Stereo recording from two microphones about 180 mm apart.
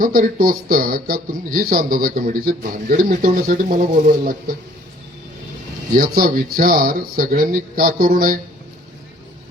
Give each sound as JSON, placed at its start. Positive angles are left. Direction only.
{"t": 0.0, "sound": "speech", "side_deg": -50}
{"t": 5.9, "sound": "speech", "side_deg": -50}